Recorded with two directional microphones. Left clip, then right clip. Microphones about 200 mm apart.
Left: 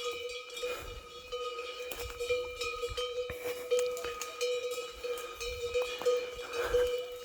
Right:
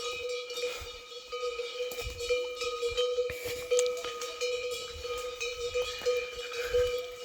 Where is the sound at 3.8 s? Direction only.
25° left (ahead or behind).